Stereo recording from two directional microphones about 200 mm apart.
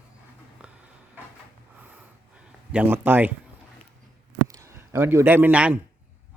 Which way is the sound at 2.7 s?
10° right (ahead or behind).